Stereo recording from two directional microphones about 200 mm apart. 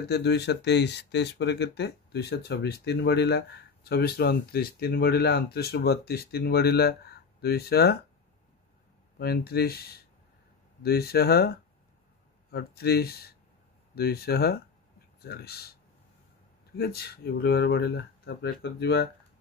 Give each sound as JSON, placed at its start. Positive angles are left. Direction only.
{"t": 0.1, "sound": "speech", "side_deg": 55}
{"t": 9.2, "sound": "speech", "side_deg": 50}